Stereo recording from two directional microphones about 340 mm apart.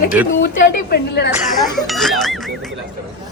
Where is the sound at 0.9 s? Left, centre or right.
Left.